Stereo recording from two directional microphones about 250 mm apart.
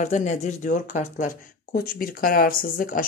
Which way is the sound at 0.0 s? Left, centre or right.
Left.